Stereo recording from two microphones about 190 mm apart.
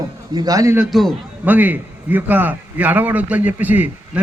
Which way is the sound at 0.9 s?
Centre (ahead or behind).